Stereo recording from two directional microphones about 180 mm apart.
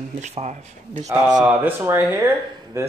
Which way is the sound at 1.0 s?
20° right (ahead or behind).